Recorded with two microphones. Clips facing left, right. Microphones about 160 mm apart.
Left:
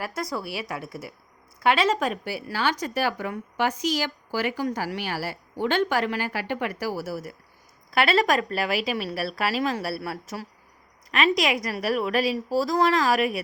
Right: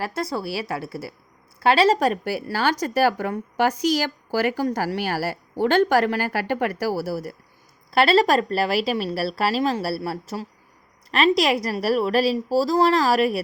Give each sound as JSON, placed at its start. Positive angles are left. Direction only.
{"t": 0.0, "sound": "speech", "side_deg": -30}